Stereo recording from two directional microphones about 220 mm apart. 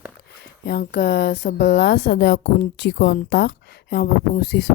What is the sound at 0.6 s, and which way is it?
A woman's voice, 45° left (ahead or behind).